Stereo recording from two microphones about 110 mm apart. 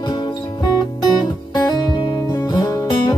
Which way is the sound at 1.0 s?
40° left (ahead or behind).